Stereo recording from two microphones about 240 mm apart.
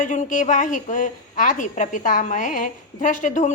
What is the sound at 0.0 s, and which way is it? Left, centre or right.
A woman's voice, left.